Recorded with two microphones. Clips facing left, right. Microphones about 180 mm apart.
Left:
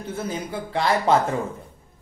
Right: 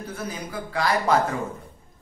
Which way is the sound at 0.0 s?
25° left (ahead or behind).